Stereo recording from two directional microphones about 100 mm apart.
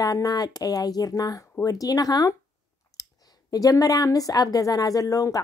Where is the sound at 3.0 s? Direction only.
35° left (ahead or behind).